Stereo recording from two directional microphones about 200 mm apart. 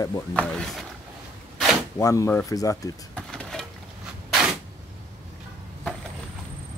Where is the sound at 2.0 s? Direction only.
15° left (ahead or behind).